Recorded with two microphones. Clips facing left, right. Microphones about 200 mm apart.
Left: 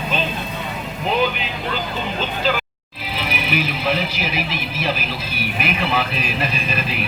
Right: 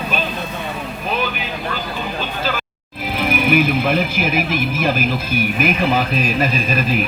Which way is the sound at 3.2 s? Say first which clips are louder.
Right 7 dB; 50° right (ahead or behind).